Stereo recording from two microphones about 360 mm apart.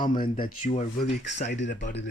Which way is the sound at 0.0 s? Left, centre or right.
Left.